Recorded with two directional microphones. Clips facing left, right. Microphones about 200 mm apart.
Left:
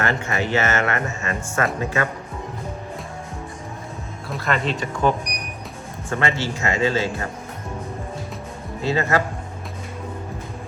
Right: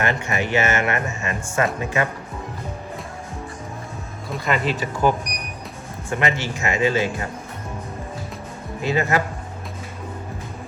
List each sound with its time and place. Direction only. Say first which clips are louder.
0.0 s speech: even; 15° right (ahead or behind)
4.3 s speech: right 1 dB; centre (ahead or behind)
6.1 s speech: even; 15° right (ahead or behind)
8.8 s speech: even; 15° right (ahead or behind)